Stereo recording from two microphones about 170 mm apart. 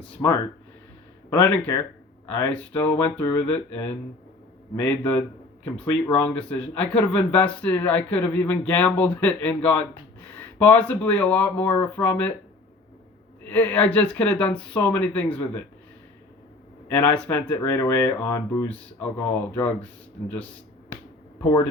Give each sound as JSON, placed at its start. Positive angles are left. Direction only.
{"t": 0.0, "sound": "speech", "side_deg": 15}
{"t": 13.5, "sound": "speech", "side_deg": 10}
{"t": 17.0, "sound": "speech", "side_deg": 15}